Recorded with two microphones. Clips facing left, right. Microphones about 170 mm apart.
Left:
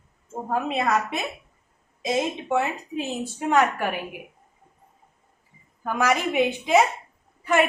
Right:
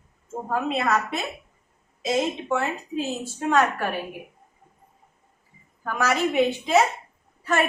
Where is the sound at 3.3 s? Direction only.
15° left (ahead or behind).